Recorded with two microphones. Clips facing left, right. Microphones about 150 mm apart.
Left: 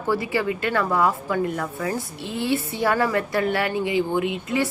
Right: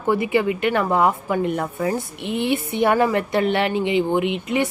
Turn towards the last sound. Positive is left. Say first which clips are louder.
# right 2 dB
turn(degrees=-20)  # may be behind; listen again after turning